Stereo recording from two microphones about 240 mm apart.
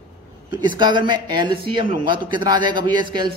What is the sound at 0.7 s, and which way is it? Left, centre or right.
A man's voice, centre.